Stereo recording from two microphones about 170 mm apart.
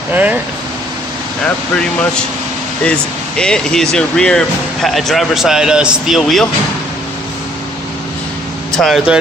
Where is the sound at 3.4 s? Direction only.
5° left (ahead or behind).